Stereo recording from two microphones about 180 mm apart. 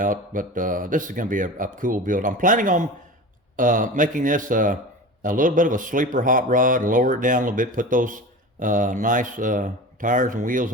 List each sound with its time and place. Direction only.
0.0 s a man's voice: 50° right (ahead or behind)